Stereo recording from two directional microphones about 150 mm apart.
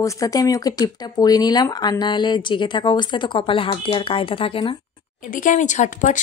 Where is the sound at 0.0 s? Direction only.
20° left (ahead or behind).